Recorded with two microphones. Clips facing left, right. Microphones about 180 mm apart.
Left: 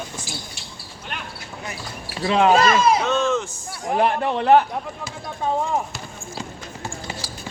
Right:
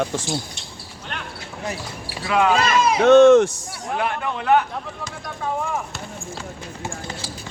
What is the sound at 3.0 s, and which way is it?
Speech, 70° right (ahead or behind).